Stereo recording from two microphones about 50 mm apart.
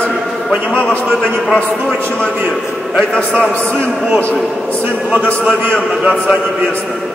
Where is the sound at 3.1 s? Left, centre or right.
Centre.